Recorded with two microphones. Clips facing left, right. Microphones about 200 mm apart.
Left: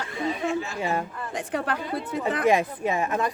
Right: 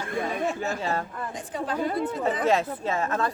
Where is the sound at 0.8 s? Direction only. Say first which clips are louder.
Left 3 dB; 15° left (ahead or behind).